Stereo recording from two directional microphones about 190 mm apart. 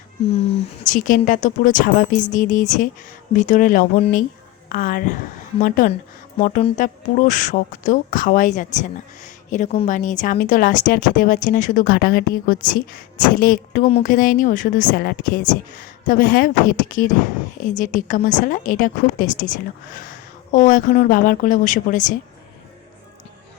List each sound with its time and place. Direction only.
0.3 s speech: 30° left (ahead or behind)
6.4 s a woman's voice: 35° left (ahead or behind)